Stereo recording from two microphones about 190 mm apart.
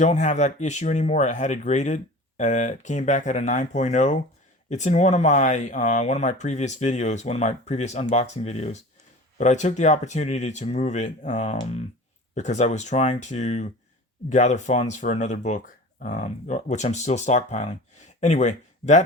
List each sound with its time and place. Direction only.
0.0 s speech: 40° left (ahead or behind)